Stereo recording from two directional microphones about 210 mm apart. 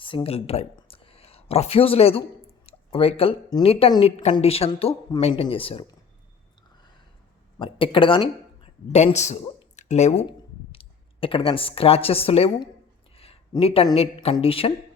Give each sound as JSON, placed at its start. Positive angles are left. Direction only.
{"t": 0.0, "sound": "a woman's voice", "side_deg": 25}
{"t": 7.6, "sound": "speech", "side_deg": 25}